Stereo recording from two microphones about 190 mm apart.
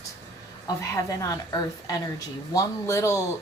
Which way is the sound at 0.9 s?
15° left (ahead or behind).